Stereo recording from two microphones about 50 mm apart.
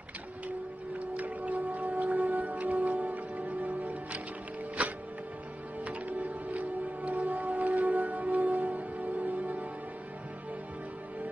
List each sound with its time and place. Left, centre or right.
1.1 s music: right